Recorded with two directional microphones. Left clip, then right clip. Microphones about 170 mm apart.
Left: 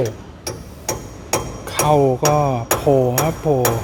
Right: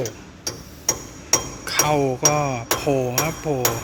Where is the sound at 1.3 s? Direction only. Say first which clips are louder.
Right 1 dB; 15° left (ahead or behind).